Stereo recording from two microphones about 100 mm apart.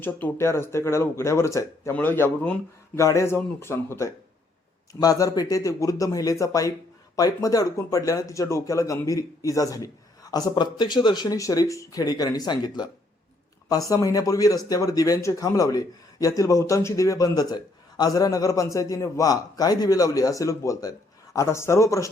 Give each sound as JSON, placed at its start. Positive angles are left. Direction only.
{"t": 0.0, "sound": "speech", "side_deg": 25}
{"t": 1.9, "sound": "speech", "side_deg": 20}
{"t": 2.9, "sound": "speech", "side_deg": 30}
{"t": 10.3, "sound": "speech", "side_deg": 45}